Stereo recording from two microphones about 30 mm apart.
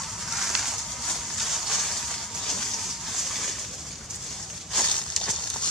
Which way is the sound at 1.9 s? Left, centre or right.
Centre.